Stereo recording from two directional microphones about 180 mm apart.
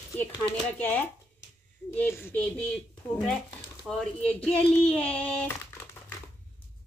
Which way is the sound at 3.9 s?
5° left (ahead or behind).